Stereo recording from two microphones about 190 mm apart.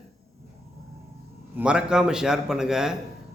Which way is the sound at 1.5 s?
5° right (ahead or behind).